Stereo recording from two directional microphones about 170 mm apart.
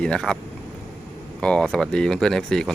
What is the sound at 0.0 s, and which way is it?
Speech, 5° left (ahead or behind).